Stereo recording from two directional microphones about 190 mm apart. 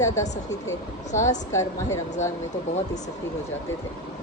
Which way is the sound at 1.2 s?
15° left (ahead or behind).